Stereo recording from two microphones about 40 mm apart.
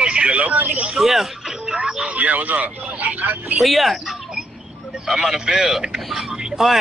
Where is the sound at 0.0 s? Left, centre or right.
Right.